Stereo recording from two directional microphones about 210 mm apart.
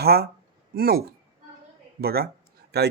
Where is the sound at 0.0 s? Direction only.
50° right (ahead or behind).